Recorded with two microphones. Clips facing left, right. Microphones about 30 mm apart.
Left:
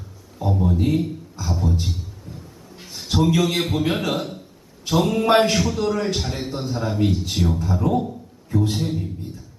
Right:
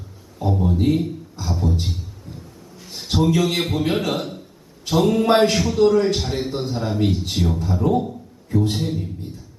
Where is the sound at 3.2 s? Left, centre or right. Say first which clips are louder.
Even; centre.